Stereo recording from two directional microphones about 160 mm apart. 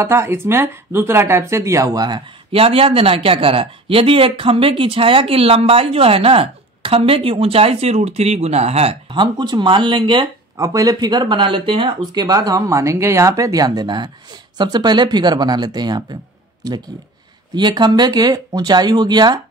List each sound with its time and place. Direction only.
0.0 s speech: 15° right (ahead or behind)
17.6 s speech: 25° right (ahead or behind)